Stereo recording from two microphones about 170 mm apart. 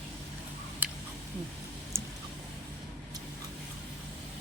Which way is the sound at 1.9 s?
15° right (ahead or behind).